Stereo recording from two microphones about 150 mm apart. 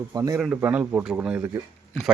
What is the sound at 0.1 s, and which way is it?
Speech, 20° right (ahead or behind).